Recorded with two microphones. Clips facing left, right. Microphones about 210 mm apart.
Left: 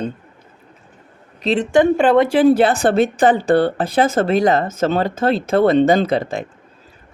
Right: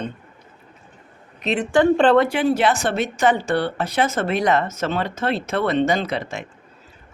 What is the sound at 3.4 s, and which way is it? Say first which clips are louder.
Speech: left 7 dB; 50° left (ahead or behind).